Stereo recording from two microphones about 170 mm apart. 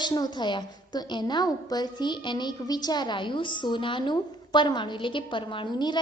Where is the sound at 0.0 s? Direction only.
25° left (ahead or behind).